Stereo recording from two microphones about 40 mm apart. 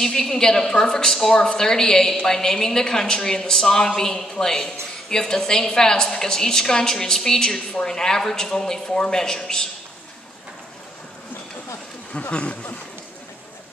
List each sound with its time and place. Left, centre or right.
0.0 s a woman's voice: centre
12.3 s speech: left